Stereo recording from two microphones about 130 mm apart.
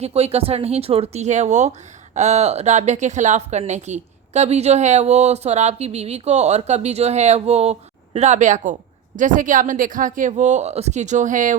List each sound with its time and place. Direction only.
0.0 s speech: 50° right (ahead or behind); by 8.7 s 70° right (ahead or behind)
9.1 s speech: 85° right